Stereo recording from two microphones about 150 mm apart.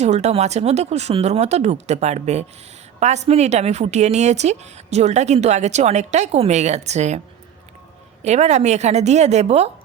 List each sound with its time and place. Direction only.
0.0 s a woman's voice: 45° right (ahead or behind)
8.2 s a woman's voice: 50° right (ahead or behind)